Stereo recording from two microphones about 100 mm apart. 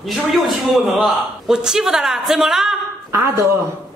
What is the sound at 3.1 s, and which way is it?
Speech, 25° right (ahead or behind).